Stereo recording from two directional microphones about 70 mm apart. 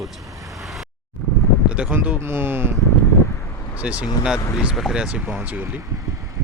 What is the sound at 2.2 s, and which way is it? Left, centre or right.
Speech, right.